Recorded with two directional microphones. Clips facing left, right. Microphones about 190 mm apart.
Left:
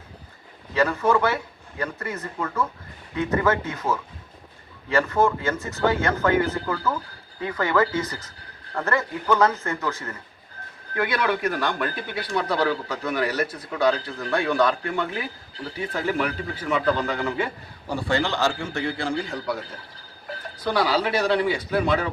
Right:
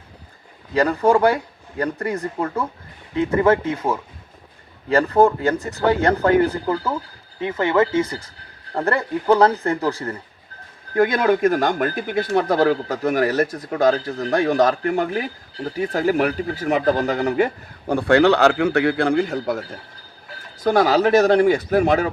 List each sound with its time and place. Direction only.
0.7 s speech: 35° right (ahead or behind)
10.9 s speech: 45° right (ahead or behind)